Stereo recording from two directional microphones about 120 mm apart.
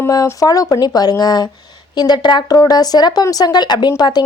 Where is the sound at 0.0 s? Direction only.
25° left (ahead or behind).